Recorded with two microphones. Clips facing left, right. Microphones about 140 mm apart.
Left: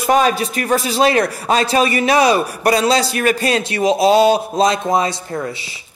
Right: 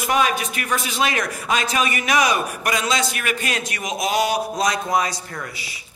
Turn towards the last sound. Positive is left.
turn(degrees=25)  # may be behind; listen again after turning